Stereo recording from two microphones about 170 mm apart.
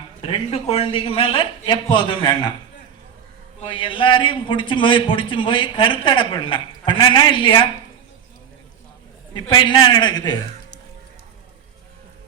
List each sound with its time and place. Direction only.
0.2 s speech: 35° left (ahead or behind)
3.6 s a man's voice: 30° left (ahead or behind)
9.3 s a man's voice: 25° left (ahead or behind)